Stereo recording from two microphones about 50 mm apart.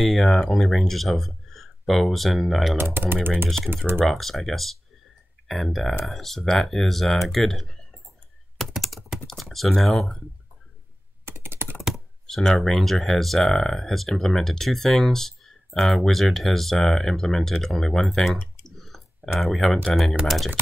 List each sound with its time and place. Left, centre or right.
0.0 s speech: centre
2.8 s speech: right
3.4 s speech: centre
3.7 s speech: right
4.0 s speech: centre
8.5 s computer keyboard: centre
9.3 s typing: centre
9.7 s speech: centre
11.2 s computer keyboard: right
12.3 s speech: centre
18.8 s clicking: centre
19.4 s speech: centre